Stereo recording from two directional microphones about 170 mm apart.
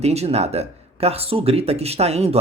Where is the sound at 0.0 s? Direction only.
40° right (ahead or behind).